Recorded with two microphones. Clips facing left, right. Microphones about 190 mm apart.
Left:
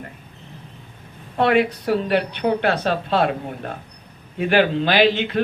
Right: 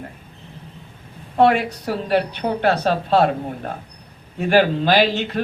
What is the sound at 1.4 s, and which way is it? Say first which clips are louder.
A woman's voice: right 1 dB; 55° left (ahead or behind).